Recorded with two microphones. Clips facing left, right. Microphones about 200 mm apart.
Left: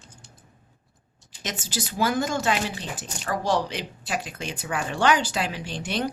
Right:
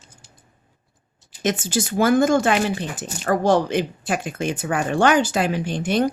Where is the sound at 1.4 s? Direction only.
50° right (ahead or behind).